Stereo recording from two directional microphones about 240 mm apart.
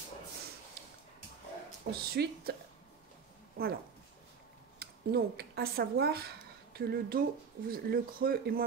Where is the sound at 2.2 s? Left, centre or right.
Right.